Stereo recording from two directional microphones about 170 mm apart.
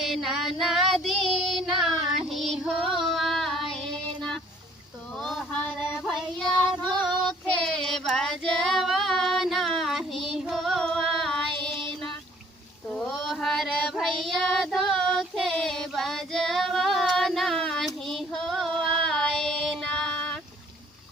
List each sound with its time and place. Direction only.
0.0 s child singing: centre (ahead or behind)
5.2 s child singing: centre (ahead or behind)
11.7 s child singing: 30° right (ahead or behind)
12.9 s child singing: centre (ahead or behind)